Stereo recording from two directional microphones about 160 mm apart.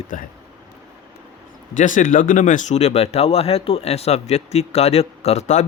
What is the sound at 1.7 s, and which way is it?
Speech, 55° left (ahead or behind).